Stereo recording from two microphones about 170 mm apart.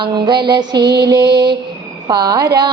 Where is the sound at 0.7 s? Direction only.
80° right.